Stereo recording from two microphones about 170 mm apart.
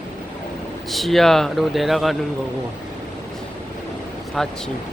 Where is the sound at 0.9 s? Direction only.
Centre (ahead or behind).